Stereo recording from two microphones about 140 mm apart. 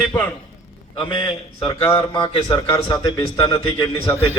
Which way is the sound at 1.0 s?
35° left (ahead or behind).